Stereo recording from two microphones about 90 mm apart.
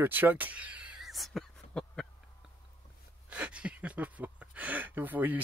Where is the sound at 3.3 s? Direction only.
15° right (ahead or behind).